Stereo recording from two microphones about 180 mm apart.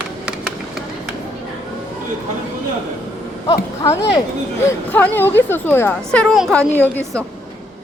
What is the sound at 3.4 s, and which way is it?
A woman's voice, 20° left (ahead or behind).